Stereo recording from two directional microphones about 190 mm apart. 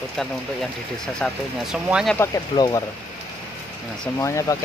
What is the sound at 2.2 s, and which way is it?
Speech, 20° left (ahead or behind).